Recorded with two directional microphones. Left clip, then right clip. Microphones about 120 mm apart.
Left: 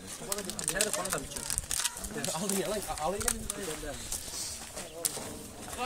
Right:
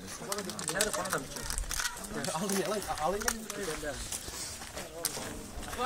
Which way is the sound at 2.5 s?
15° left (ahead or behind).